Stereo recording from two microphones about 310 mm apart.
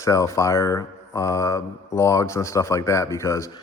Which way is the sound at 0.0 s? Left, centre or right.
Centre.